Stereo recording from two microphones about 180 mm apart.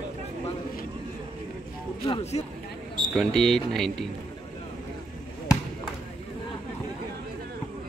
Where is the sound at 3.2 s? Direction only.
5° left (ahead or behind).